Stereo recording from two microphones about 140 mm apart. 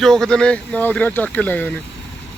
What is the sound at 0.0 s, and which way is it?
Speech, 5° left (ahead or behind).